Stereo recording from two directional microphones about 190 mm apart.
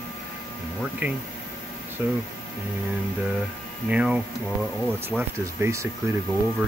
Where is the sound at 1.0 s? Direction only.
10° right (ahead or behind).